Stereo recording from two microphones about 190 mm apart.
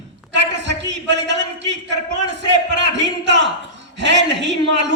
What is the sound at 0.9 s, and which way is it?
A man's voice, 65° right (ahead or behind).